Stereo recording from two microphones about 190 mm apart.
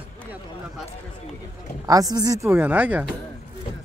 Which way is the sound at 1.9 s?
20° right (ahead or behind).